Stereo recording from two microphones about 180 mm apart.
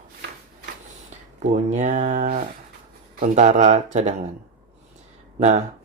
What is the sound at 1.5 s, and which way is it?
Speech, 40° right (ahead or behind).